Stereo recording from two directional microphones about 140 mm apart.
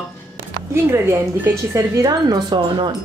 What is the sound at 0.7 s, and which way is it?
A woman's voice, 20° right (ahead or behind).